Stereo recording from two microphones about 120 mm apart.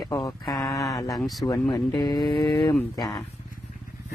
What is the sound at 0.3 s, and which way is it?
Speech, 30° left (ahead or behind).